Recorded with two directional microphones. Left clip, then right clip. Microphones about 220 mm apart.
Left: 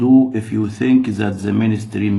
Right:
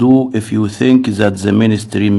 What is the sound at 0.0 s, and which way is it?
Speech, 45° right (ahead or behind).